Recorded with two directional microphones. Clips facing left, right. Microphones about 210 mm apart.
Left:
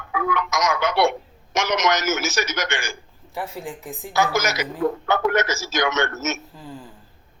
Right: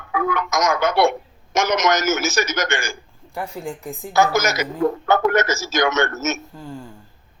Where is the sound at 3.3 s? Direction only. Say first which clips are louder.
Right 2 dB; centre (ahead or behind).